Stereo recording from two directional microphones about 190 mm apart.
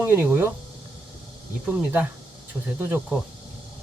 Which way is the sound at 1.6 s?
10° right (ahead or behind).